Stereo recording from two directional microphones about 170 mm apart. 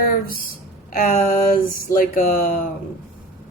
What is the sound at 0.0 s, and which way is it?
Speech, 55° left (ahead or behind).